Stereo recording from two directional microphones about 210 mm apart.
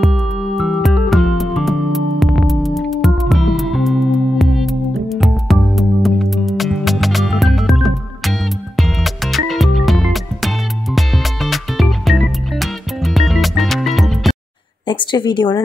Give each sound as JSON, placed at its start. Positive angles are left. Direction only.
{"t": 0.0, "sound": "music", "side_deg": 0}
{"t": 14.9, "sound": "a woman's voice", "side_deg": 20}